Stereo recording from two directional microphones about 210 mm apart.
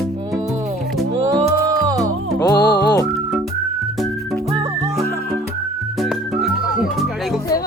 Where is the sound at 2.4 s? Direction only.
15° left (ahead or behind).